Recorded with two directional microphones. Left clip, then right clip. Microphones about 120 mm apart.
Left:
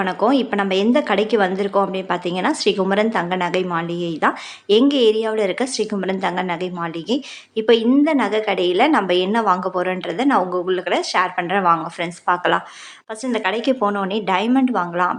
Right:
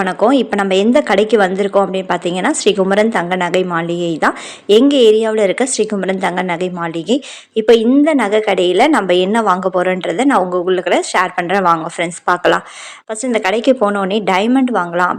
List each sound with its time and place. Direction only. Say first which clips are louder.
0.0 s a woman's voice: right 5 dB; 35° right (ahead or behind)